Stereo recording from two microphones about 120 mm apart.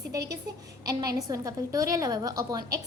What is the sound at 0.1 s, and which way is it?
A woman's voice, 30° right (ahead or behind).